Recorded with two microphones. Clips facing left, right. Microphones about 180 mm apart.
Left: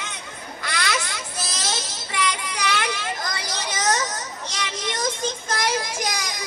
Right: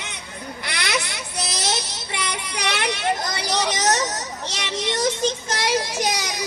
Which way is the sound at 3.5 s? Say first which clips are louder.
Right 5 dB; 70° right (ahead or behind).